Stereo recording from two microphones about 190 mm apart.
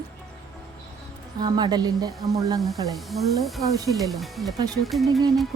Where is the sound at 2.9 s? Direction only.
Centre (ahead or behind).